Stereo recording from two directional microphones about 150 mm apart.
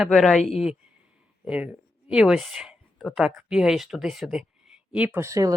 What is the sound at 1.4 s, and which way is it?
Speech, 10° right (ahead or behind).